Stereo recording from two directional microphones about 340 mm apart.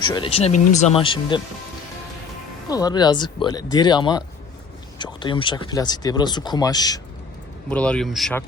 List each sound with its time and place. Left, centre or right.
0.1 s speech: centre
2.6 s speech: centre